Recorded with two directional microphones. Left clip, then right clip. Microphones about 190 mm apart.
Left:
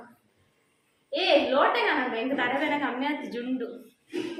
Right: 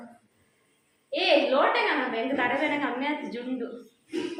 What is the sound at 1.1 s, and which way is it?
A woman's voice, centre (ahead or behind).